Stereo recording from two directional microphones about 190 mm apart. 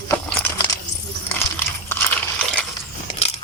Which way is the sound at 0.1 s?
5° left (ahead or behind).